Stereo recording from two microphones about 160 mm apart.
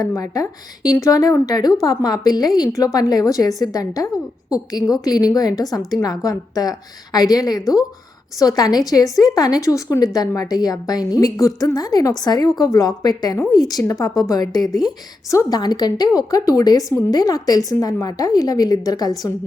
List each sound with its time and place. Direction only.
0.0 s a woman's voice: 20° left (ahead or behind)